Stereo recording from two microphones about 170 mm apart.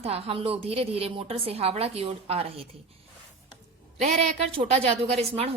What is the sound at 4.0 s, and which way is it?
A woman's voice, 45° right (ahead or behind).